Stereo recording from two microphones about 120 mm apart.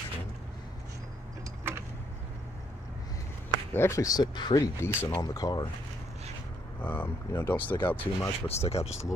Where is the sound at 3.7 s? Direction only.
20° left (ahead or behind).